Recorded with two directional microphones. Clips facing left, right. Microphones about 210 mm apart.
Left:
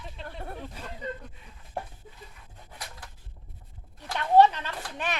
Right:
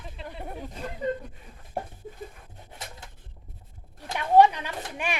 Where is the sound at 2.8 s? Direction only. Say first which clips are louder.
Right 2 dB; 25° right (ahead or behind).